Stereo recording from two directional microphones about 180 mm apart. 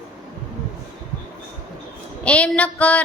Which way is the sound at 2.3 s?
5° left (ahead or behind).